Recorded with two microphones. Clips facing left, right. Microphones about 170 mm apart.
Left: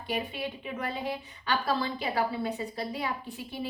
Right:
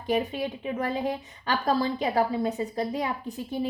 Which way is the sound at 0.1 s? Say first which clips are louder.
Right 7 dB; 40° right (ahead or behind).